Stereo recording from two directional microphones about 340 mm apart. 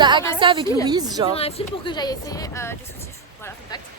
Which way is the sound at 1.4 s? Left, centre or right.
Centre.